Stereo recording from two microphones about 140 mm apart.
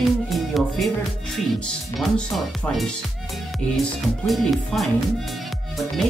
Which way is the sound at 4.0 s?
Centre (ahead or behind).